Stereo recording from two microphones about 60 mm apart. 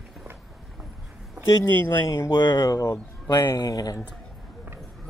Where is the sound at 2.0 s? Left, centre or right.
Left.